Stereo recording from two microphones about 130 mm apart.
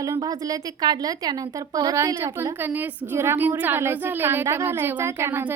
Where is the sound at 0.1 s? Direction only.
30° right (ahead or behind).